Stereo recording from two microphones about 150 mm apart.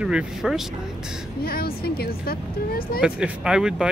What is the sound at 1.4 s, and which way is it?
Speech, 90° left.